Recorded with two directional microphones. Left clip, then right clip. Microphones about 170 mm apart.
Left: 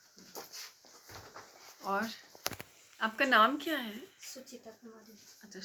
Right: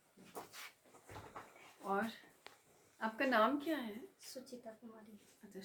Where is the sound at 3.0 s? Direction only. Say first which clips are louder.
Left 8 dB; 40° left (ahead or behind).